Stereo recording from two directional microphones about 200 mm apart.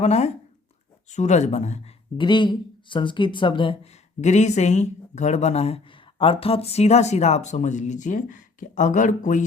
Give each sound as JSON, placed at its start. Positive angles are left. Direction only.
{"t": 0.0, "sound": "speech", "side_deg": 35}
{"t": 2.2, "sound": "speech", "side_deg": 25}
{"t": 4.2, "sound": "speech", "side_deg": 35}